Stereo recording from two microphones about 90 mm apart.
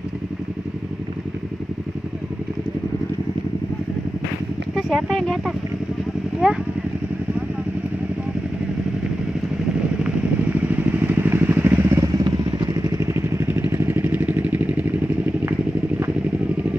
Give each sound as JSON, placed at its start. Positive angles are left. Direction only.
{"t": 4.7, "sound": "a sound", "side_deg": -5}
{"t": 6.4, "sound": "speech", "side_deg": -10}
{"t": 10.6, "sound": "vehicle", "side_deg": -20}
{"t": 12.3, "sound": "vehicle", "side_deg": -50}
{"t": 13.0, "sound": "vehicle", "side_deg": -30}